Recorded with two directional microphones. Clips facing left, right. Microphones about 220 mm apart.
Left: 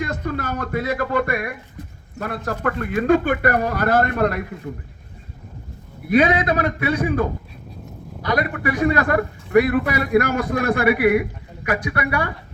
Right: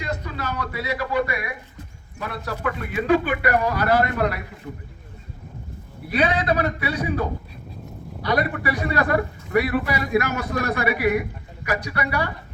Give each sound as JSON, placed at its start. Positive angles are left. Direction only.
{"t": 0.0, "sound": "a man's voice", "side_deg": 50}
{"t": 6.1, "sound": "a man's voice", "side_deg": 45}